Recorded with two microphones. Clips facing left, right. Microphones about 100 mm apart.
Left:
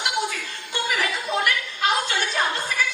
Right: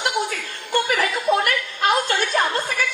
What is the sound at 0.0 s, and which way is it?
Chuckle, 50° right (ahead or behind).